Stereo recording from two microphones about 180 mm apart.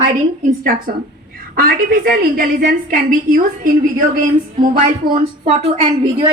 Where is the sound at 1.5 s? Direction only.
55° right (ahead or behind).